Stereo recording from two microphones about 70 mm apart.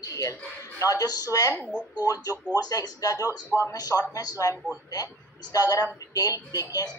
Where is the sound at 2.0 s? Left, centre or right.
Left.